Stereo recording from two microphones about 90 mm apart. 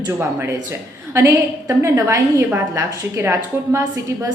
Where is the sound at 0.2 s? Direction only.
30° right (ahead or behind).